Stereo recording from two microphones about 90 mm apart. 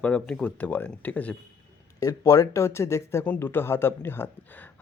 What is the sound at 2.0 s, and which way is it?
Speech, 40° left (ahead or behind).